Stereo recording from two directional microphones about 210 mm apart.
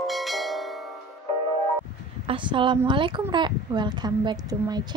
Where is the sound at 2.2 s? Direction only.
25° right (ahead or behind).